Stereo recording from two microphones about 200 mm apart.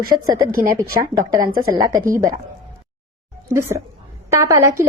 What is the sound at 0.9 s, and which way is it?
Speech, 45° right (ahead or behind).